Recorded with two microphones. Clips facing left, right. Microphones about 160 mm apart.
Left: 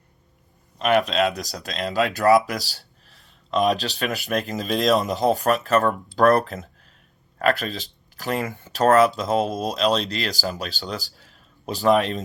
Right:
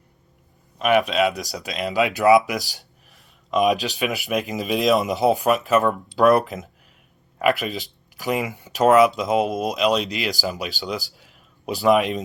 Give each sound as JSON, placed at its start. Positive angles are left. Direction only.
{"t": 0.8, "sound": "speech", "side_deg": -5}